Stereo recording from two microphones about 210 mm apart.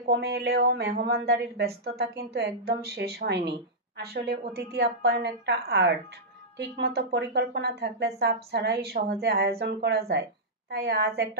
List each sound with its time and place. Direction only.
0.0 s speech: 50° right (ahead or behind)